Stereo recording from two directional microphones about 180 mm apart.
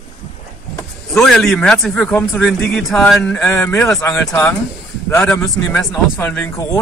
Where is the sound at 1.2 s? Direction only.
5° left (ahead or behind).